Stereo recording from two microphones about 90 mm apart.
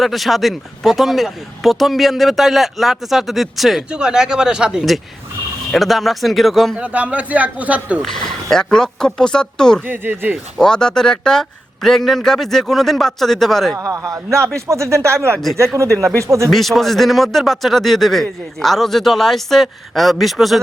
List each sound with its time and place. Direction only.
0.0 s speech: centre (ahead or behind)
6.7 s speech: 15° right (ahead or behind)
8.0 s speech: 5° left (ahead or behind)
9.8 s speech: 20° right (ahead or behind)
10.6 s speech: 10° left (ahead or behind)
13.7 s speech: 40° right (ahead or behind)
16.5 s speech: centre (ahead or behind)